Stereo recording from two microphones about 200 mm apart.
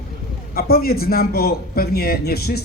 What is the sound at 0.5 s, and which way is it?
Speech, 50° left (ahead or behind).